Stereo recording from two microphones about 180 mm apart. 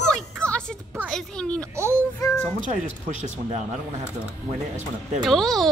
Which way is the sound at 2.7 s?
40° right (ahead or behind).